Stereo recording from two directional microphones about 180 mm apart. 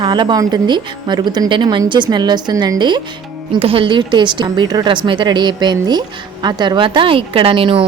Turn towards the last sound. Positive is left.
turn(degrees=-30)  # may be behind; listen again after turning